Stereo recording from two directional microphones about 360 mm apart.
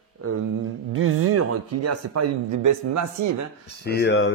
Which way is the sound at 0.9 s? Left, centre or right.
Right.